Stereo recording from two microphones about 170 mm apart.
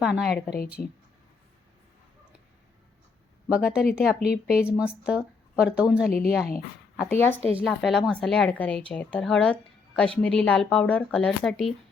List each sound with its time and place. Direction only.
0.0 s speech: centre (ahead or behind)
0.8 s a woman's voice: 10° left (ahead or behind)
3.5 s speech: 5° right (ahead or behind)
6.1 s a woman's voice: 60° left (ahead or behind)
7.1 s a woman's voice: 10° left (ahead or behind)